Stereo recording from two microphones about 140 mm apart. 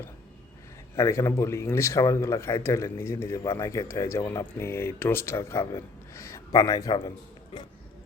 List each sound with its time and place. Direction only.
0.9 s speech: 20° left (ahead or behind)